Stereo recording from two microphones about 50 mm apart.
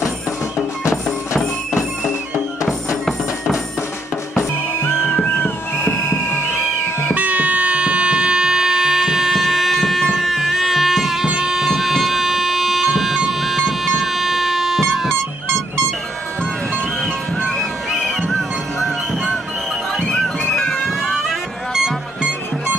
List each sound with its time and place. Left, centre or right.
5.3 s a sound: left
7.2 s music: right; by 15.0 s centre
17.5 s music: centre